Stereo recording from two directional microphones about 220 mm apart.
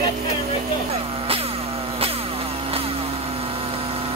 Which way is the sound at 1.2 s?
25° right (ahead or behind).